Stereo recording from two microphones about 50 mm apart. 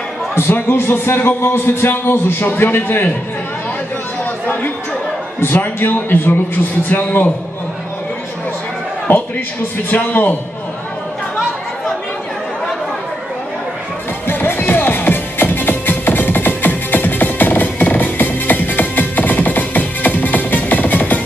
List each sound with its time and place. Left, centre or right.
0.3 s speech: left
4.5 s chatter: left
5.4 s a man's voice: left
9.1 s a man's voice: left
14.2 s music: left